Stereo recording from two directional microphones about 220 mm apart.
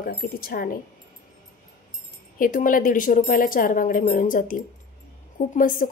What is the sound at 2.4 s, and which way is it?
A woman's voice, 35° left (ahead or behind).